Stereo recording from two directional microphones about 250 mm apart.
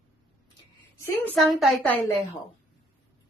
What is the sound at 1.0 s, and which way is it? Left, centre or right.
A woman's voice, centre.